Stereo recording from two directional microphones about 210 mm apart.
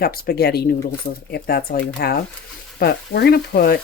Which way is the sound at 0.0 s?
45° left (ahead or behind).